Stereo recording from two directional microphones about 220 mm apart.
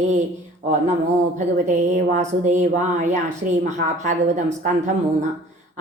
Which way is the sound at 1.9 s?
35° right (ahead or behind).